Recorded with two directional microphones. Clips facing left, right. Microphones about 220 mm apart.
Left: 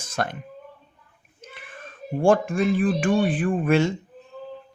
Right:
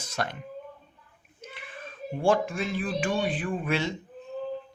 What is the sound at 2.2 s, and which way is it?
Speech, 50° left (ahead or behind).